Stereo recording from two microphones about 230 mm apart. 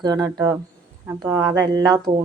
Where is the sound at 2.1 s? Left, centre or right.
Right.